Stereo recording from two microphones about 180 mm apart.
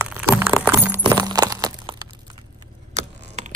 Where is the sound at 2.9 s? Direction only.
40° right (ahead or behind).